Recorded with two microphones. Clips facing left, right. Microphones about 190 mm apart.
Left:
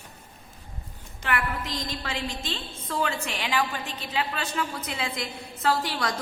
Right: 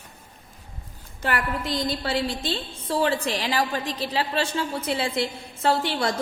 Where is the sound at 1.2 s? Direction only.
35° right (ahead or behind).